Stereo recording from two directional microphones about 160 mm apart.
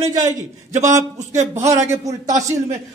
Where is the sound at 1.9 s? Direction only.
20° right (ahead or behind).